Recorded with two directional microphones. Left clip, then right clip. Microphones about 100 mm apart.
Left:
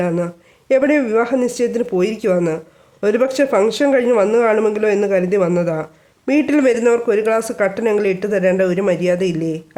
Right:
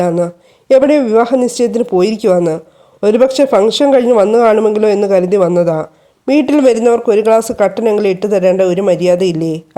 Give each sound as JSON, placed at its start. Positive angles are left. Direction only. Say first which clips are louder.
{"t": 0.0, "sound": "a man's voice", "louder": "right 6 dB", "side_deg": -35}